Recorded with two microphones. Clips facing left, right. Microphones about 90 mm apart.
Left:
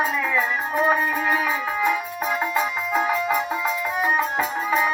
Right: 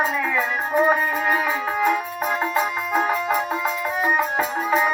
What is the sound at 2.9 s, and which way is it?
Music, 40° right (ahead or behind).